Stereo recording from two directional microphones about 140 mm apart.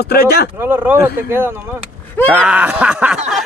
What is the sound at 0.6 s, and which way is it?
Speech, 15° right (ahead or behind).